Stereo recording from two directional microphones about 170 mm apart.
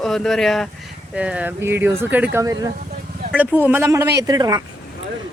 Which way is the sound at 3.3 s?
10° right (ahead or behind).